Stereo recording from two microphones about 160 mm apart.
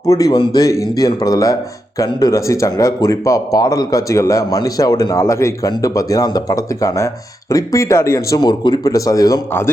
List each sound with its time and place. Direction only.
0.0 s speech: 20° left (ahead or behind)